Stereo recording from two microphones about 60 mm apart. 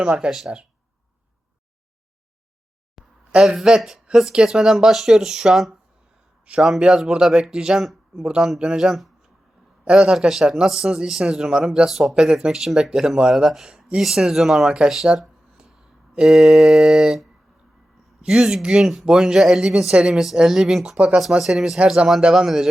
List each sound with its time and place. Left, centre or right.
0.0 s a man's voice: centre
2.9 s a sound: centre
4.1 s a man's voice: centre
9.8 s a man's voice: centre
14.0 s mantra: centre
14.8 s a sound: centre
16.1 s mantra: centre
18.3 s mantra: centre
19.0 s a man's voice: centre
20.1 s mantra: centre
21.8 s a man's voice: centre